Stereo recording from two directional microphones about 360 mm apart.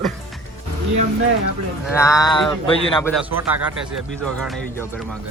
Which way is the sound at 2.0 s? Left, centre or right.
Centre.